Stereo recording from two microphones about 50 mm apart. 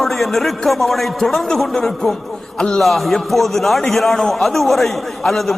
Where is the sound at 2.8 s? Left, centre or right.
Centre.